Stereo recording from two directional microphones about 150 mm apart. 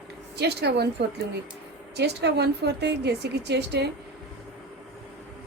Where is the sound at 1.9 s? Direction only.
90° right.